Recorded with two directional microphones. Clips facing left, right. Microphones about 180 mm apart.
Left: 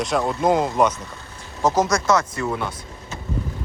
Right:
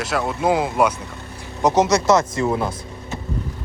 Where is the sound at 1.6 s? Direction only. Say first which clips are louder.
Right 3 dB; 15° right (ahead or behind).